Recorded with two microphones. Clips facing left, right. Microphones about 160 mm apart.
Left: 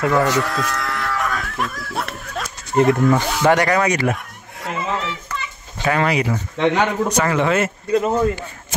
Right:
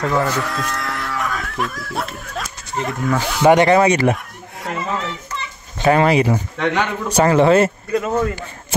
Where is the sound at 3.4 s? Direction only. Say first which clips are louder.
Right 5 dB; 25° right (ahead or behind).